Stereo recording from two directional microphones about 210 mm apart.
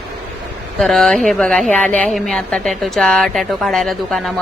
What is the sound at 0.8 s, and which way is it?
A woman's voice, centre (ahead or behind).